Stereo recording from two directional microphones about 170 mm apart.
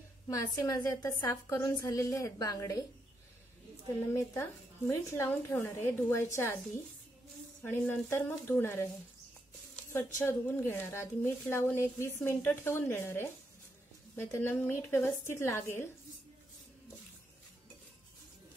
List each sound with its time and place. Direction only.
0.3 s a woman's voice: 20° left (ahead or behind)
4.1 s a woman's voice: 15° left (ahead or behind)
7.6 s a woman's voice: 10° left (ahead or behind)
9.9 s a woman's voice: 15° left (ahead or behind)